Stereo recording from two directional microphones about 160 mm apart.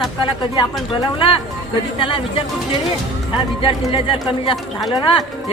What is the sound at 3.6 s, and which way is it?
Speech, 35° left (ahead or behind).